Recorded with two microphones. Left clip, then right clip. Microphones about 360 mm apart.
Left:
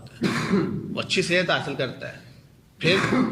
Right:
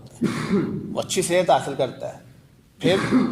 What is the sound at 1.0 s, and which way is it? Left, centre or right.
A man's voice, centre.